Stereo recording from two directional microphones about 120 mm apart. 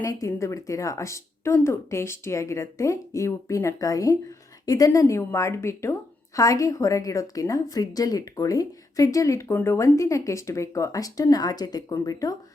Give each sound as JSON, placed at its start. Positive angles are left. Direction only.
{"t": 0.1, "sound": "a woman's voice", "side_deg": 30}